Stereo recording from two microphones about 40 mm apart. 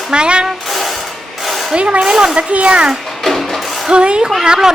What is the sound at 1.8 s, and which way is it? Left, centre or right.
Speech, right.